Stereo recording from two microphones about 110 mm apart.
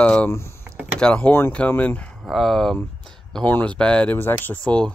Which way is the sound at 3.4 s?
10° left (ahead or behind).